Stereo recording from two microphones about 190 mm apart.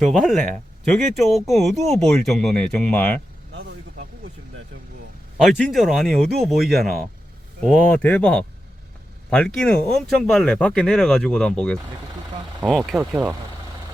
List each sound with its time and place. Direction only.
0.0 s speech: centre (ahead or behind)
5.4 s speech: 5° left (ahead or behind)